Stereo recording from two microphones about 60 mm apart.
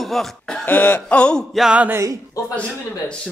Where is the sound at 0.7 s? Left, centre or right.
Left.